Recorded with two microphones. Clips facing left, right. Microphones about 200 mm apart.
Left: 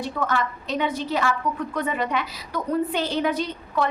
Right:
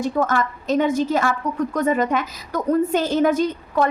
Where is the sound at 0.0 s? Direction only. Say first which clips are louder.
Right 5 dB; 45° right (ahead or behind).